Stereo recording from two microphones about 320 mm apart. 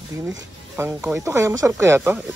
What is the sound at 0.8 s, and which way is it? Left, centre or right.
Speech, centre.